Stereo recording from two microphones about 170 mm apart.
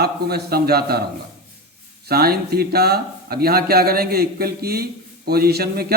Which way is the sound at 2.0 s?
65° right (ahead or behind).